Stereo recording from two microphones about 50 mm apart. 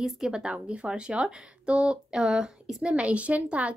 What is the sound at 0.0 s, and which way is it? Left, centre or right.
A woman's voice, centre.